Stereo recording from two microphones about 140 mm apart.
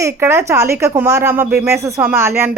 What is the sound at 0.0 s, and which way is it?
A woman's voice, 20° right (ahead or behind).